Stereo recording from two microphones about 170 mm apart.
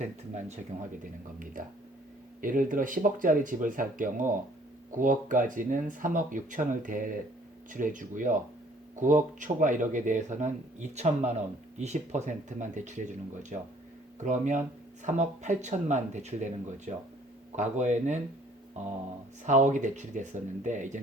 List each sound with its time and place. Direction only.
0.0 s speech: 45° right (ahead or behind)
2.4 s speech: 55° right (ahead or behind)
19.5 s speech: 45° right (ahead or behind)